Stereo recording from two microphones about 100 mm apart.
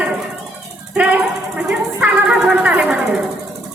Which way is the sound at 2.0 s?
15° right (ahead or behind).